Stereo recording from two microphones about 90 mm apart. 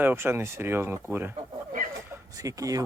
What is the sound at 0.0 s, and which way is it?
Speech, 25° right (ahead or behind).